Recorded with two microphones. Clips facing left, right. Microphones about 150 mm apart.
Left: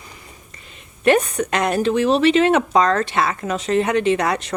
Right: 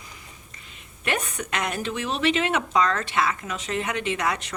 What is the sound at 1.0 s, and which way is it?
Speech, 35° left (ahead or behind).